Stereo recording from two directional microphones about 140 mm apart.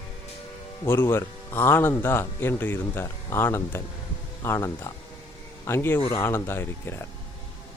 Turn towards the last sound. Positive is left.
turn(degrees=15)  # may be behind; listen again after turning